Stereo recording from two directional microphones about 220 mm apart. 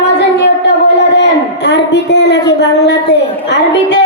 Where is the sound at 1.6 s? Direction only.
50° left (ahead or behind).